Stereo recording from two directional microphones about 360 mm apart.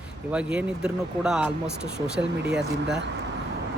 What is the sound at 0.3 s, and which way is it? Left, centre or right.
Speech, centre.